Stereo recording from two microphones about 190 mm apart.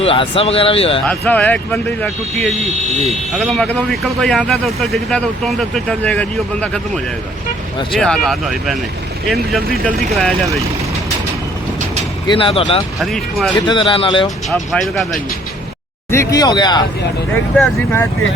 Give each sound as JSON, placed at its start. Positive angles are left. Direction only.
{"t": 0.0, "sound": "speech", "side_deg": 30}
{"t": 1.0, "sound": "speech", "side_deg": 5}
{"t": 7.9, "sound": "speech", "side_deg": 5}
{"t": 12.3, "sound": "speech", "side_deg": 30}
{"t": 13.0, "sound": "speech", "side_deg": 0}
{"t": 13.7, "sound": "speech", "side_deg": 25}
{"t": 14.5, "sound": "speech", "side_deg": 0}
{"t": 16.1, "sound": "speech", "side_deg": 15}
{"t": 17.5, "sound": "speech", "side_deg": 5}